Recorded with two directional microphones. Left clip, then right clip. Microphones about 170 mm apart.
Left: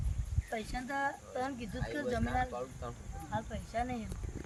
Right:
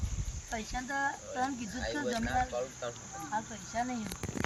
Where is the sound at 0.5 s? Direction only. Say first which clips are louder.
Right 2 dB; 40° left (ahead or behind).